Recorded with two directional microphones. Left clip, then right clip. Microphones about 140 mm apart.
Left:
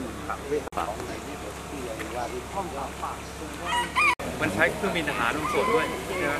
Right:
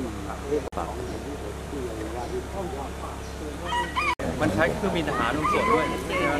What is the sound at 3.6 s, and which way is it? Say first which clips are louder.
Chicken: left 3 dB; 10° left (ahead or behind).